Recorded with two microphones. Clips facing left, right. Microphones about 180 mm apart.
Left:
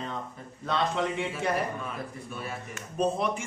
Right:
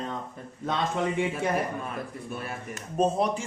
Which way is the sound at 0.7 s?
50° right (ahead or behind).